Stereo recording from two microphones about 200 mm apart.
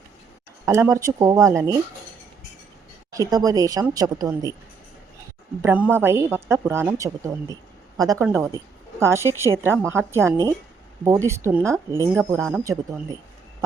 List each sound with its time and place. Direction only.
0.6 s a woman's voice: 15° right (ahead or behind)
3.1 s a woman's voice: 20° right (ahead or behind)
5.6 s a woman's voice: 10° right (ahead or behind)